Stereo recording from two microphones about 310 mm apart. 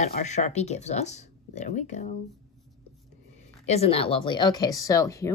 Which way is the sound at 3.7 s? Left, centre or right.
Centre.